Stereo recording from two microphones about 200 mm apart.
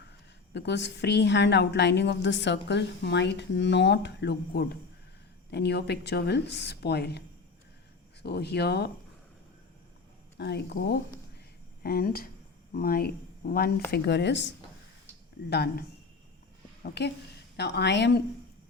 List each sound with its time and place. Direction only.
0.5 s a woman's voice: 60° left (ahead or behind)
8.2 s a woman's voice: 55° left (ahead or behind)
10.3 s a woman's voice: 55° left (ahead or behind)
16.8 s a woman's voice: 55° left (ahead or behind)